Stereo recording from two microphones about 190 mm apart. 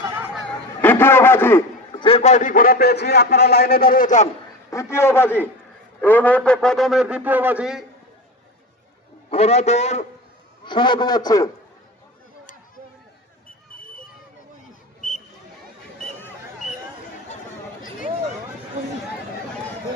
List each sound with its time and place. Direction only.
0.8 s a sound: 10° left (ahead or behind)
1.9 s a man's voice: 25° left (ahead or behind)
4.7 s a man's voice: 15° left (ahead or behind); by 7.9 s 5° right (ahead or behind)
9.3 s a man's voice: 35° left (ahead or behind)
10.6 s a man's voice: 25° left (ahead or behind)
15.0 s a sound: 45° left (ahead or behind)